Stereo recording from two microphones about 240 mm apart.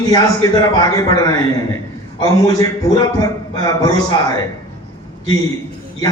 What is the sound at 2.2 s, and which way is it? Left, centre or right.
A man's voice, centre.